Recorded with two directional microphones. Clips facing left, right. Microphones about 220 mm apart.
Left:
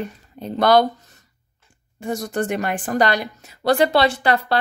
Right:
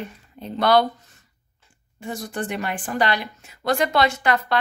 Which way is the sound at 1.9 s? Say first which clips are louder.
Left 6 dB; 45° left (ahead or behind).